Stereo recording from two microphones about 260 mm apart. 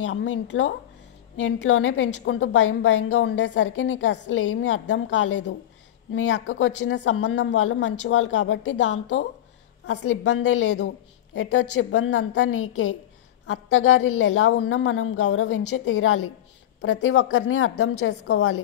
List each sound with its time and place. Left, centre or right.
0.0 s a woman's voice: left